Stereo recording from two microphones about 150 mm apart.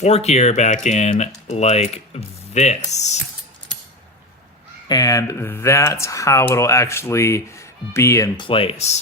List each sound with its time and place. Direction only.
0.0 s speech: 45° left (ahead or behind)
4.9 s speech: 25° left (ahead or behind)
8.4 s speech: 35° left (ahead or behind)